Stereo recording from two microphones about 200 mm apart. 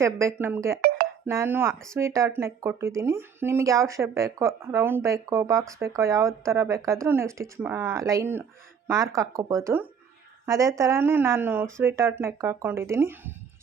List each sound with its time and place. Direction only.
0.0 s speech: 15° right (ahead or behind)
0.8 s music: 50° right (ahead or behind)
1.3 s speech: 10° right (ahead or behind)